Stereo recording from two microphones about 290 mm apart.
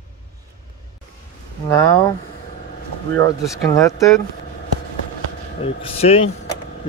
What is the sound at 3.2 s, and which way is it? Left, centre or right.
Speech, centre.